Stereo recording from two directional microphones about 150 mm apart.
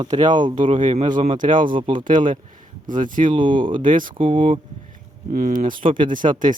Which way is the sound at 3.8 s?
65° right (ahead or behind).